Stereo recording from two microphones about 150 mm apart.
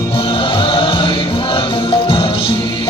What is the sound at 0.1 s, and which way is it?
Music, 40° left (ahead or behind).